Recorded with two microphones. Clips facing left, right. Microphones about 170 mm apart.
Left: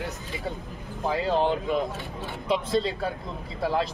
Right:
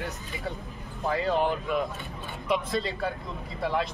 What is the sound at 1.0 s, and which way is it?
Speech, 30° left (ahead or behind).